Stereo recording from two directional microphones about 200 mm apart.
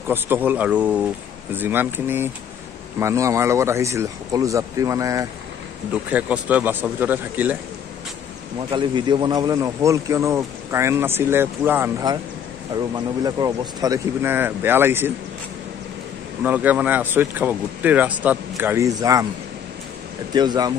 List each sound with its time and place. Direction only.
0.1 s a man's voice: 10° right (ahead or behind)
8.7 s a man's voice: 25° right (ahead or behind)
13.2 s a man's voice: 20° right (ahead or behind)
16.4 s a man's voice: 10° right (ahead or behind)
20.3 s speech: 20° right (ahead or behind)